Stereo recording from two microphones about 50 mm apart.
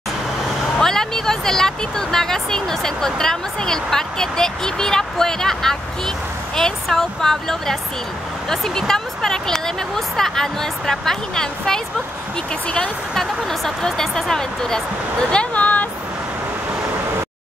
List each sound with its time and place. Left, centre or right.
0.7 s speech: centre
13.1 s speech: centre
15.3 s a sound: left